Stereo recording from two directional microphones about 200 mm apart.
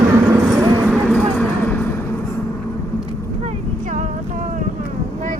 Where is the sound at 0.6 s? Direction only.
10° right (ahead or behind).